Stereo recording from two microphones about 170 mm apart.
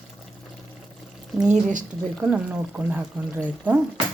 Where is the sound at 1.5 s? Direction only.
50° right (ahead or behind).